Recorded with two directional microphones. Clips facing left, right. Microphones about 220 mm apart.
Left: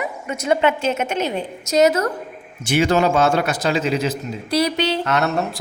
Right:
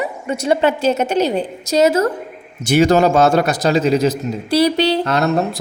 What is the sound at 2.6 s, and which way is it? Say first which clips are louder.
A man's voice: right 5 dB; 40° right (ahead or behind).